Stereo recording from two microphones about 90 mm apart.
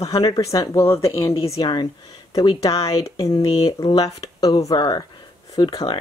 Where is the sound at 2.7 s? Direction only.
90° left.